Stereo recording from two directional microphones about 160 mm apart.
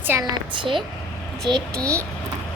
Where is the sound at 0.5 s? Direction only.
30° right (ahead or behind).